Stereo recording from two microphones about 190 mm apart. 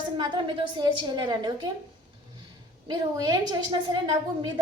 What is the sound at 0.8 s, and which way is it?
Speech, 20° right (ahead or behind).